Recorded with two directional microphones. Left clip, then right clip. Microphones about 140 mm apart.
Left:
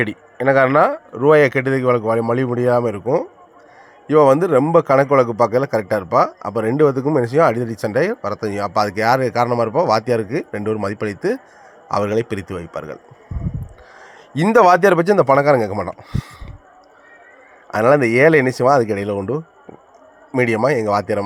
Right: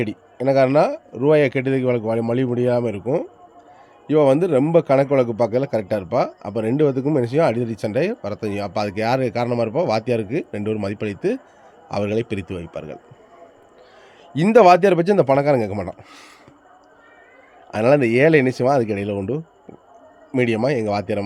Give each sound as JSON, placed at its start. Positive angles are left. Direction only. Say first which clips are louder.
{"t": 0.0, "sound": "a man's voice", "louder": "left 4 dB", "side_deg": -25}
{"t": 4.0, "sound": "a man's voice", "louder": "left 3 dB", "side_deg": -20}
{"t": 14.3, "sound": "a man's voice", "louder": "even", "side_deg": -20}
{"t": 17.7, "sound": "a man's voice", "louder": "left 3 dB", "side_deg": -20}